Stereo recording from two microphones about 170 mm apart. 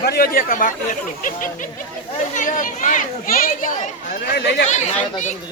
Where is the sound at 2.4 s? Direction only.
50° left (ahead or behind).